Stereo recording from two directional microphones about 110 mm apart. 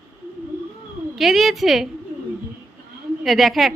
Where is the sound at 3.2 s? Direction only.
Centre (ahead or behind).